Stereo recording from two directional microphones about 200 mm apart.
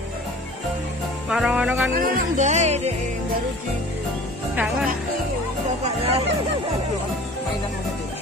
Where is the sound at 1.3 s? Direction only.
5° right (ahead or behind).